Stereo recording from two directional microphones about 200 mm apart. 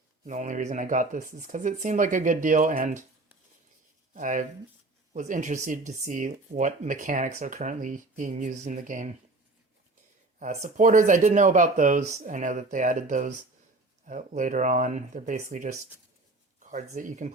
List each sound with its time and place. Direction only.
0.3 s speech: 40° right (ahead or behind)
4.1 s speech: 40° right (ahead or behind)
10.4 s speech: 40° right (ahead or behind)